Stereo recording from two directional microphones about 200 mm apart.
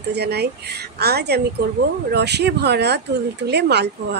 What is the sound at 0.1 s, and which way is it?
A woman's voice, 55° right (ahead or behind).